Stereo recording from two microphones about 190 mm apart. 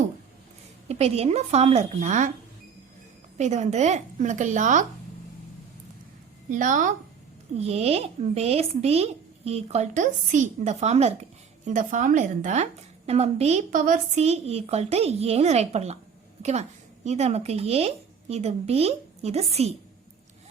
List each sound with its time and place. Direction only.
0.9 s speech: 35° right (ahead or behind)
3.3 s speech: 40° right (ahead or behind)
6.5 s a woman's voice: 45° right (ahead or behind)
7.6 s speech: 30° right (ahead or behind)